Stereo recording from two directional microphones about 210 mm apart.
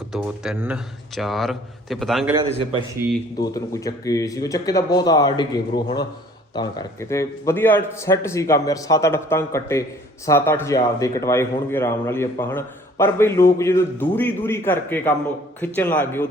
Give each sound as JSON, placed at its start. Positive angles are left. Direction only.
{"t": 0.1, "sound": "a man's voice", "side_deg": -5}
{"t": 3.3, "sound": "speech", "side_deg": 15}